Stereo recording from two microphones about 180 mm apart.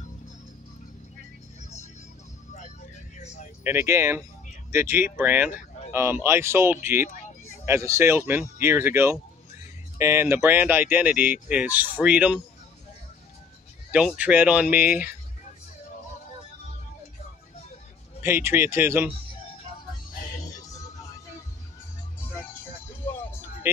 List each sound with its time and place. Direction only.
3.2 s a sound: 40° left (ahead or behind)
3.6 s speech: 15° right (ahead or behind)
13.9 s speech: 5° right (ahead or behind)
18.2 s speech: 15° right (ahead or behind)